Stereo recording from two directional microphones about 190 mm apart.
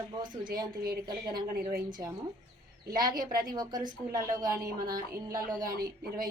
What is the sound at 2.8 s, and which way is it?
Speech, 50° right (ahead or behind).